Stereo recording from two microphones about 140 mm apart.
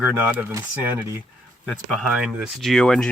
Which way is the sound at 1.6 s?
Centre (ahead or behind).